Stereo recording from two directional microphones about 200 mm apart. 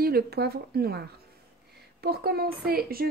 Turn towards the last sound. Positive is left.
turn(degrees=-50)  # may be behind; listen again after turning